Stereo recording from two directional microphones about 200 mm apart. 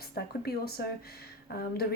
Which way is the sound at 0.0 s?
50° left (ahead or behind).